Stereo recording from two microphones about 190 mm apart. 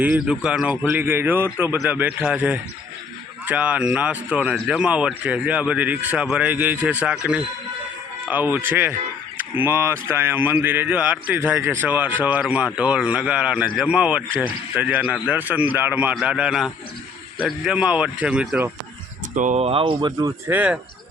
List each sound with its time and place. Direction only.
0.0 s a man's voice: 5° right (ahead or behind)
19.3 s speech: 40° right (ahead or behind); by 20.7 s 10° right (ahead or behind)